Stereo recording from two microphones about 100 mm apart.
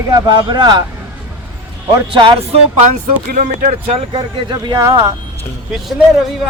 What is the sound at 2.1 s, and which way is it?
Speech, 55° right (ahead or behind).